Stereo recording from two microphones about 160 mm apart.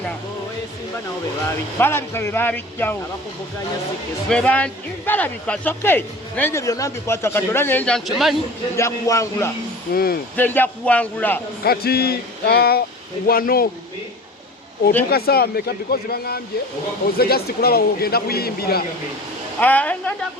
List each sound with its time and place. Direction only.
1.5 s speech: 15° left (ahead or behind)
4.3 s speech: 5° left (ahead or behind)
8.7 s a man's voice: 20° left (ahead or behind)
9.9 s a man's voice: 70° left (ahead or behind)
10.3 s speech: 10° left (ahead or behind)
11.6 s a man's voice: 75° left (ahead or behind)
13.2 s a man's voice: 65° left (ahead or behind)
15.1 s a man's voice: 75° left (ahead or behind)
19.5 s speech: 10° left (ahead or behind)